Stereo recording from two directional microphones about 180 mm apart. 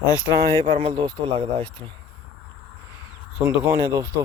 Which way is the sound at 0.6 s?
25° right (ahead or behind).